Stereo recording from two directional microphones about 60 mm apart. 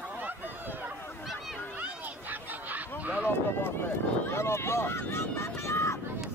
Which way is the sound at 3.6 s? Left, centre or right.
Left.